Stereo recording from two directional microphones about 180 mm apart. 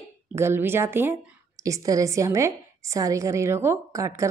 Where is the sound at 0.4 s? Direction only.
15° right (ahead or behind).